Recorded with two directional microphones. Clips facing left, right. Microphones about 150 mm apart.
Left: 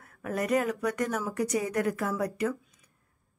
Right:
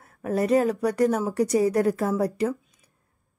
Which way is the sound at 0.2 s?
30° right (ahead or behind).